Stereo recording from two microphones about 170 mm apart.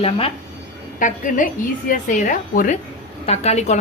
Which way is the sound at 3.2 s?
40° left (ahead or behind).